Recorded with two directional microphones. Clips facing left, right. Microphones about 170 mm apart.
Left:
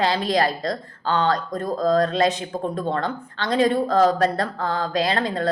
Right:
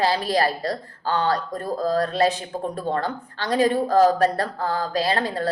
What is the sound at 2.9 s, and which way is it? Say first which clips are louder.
Speech: even; 35° right (ahead or behind).